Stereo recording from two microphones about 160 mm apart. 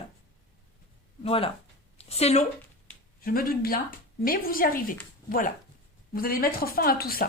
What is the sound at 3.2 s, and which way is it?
A woman's voice, 65° left (ahead or behind).